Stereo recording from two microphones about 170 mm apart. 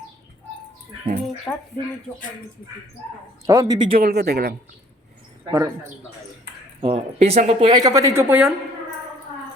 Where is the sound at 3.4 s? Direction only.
20° right (ahead or behind).